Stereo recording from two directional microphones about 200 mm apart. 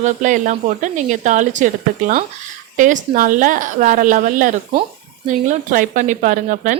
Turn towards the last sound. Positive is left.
turn(degrees=-40)  # may be behind; listen again after turning